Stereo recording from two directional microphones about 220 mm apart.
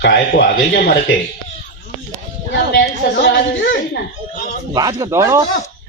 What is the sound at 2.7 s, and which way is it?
A woman's voice, 45° left (ahead or behind).